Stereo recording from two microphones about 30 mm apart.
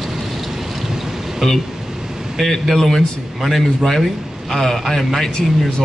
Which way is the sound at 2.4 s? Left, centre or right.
Centre.